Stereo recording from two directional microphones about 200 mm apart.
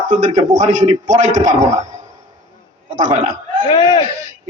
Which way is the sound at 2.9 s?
40° right (ahead or behind).